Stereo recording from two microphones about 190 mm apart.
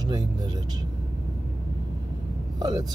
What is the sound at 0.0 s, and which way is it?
Speech, 20° right (ahead or behind).